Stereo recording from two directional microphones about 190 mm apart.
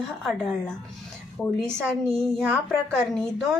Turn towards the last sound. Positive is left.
turn(degrees=0)  # may be behind; listen again after turning